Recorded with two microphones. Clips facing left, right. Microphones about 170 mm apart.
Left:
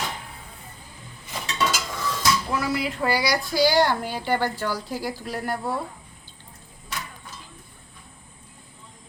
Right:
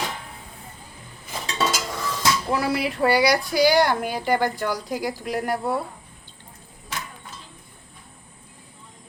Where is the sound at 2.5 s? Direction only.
30° right (ahead or behind).